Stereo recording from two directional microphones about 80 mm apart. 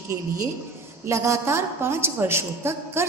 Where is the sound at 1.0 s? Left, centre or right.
Right.